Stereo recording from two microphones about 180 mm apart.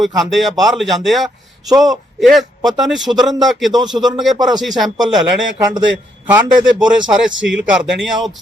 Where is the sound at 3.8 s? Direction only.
Centre (ahead or behind).